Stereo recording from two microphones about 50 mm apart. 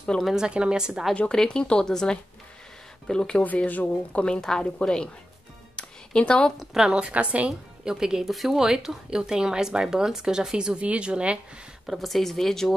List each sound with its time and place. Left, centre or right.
0.0 s speech: centre
0.3 s speech: centre
1.3 s a woman's voice: centre
3.4 s speech: left
4.2 s a woman's voice: centre
5.8 s music: centre
6.6 s speech: centre
6.9 s a woman's voice: centre
7.4 s speech: centre
11.8 s speech: centre